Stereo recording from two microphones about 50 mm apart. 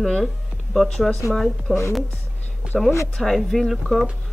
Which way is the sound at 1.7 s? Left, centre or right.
Centre.